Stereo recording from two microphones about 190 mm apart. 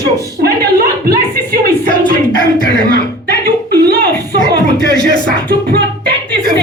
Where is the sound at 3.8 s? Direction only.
55° right (ahead or behind).